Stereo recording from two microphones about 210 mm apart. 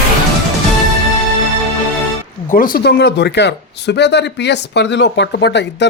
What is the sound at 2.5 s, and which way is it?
Speech, 40° left (ahead or behind).